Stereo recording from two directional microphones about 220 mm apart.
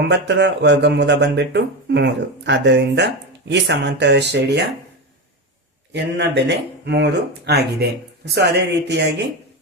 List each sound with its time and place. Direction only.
0.1 s speech: 55° right (ahead or behind)
5.9 s speech: 50° right (ahead or behind)